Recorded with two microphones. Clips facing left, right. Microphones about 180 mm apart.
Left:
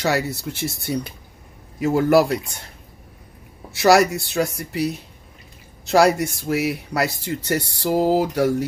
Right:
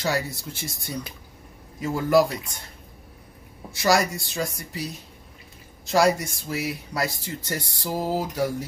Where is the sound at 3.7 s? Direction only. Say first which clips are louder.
Left 7 dB; 70° left (ahead or behind).